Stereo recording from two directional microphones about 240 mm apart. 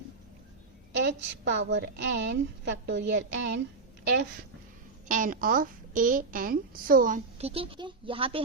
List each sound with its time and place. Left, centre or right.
1.0 s a woman's voice: right
5.0 s a woman's voice: right